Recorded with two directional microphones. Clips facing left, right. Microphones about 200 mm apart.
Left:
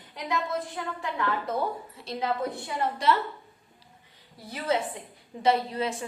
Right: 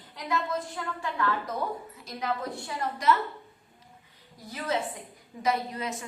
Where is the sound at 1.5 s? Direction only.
25° left (ahead or behind).